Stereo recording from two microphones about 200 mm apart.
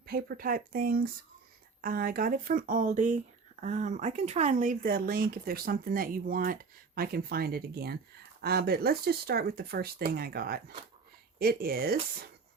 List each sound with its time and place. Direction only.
0.0 s speech: 50° right (ahead or behind)